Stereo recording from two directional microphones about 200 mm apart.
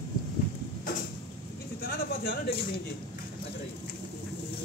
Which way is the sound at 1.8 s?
50° left (ahead or behind).